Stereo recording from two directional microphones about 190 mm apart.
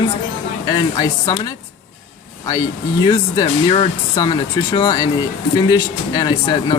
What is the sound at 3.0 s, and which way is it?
Speech, 20° left (ahead or behind).